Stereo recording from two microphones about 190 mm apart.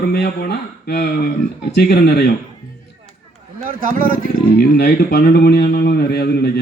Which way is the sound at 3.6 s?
45° right (ahead or behind).